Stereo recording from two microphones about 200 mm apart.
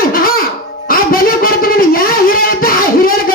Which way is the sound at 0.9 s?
45° left (ahead or behind).